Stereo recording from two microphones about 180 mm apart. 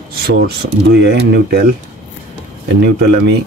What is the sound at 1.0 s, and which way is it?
Speech, 70° right (ahead or behind).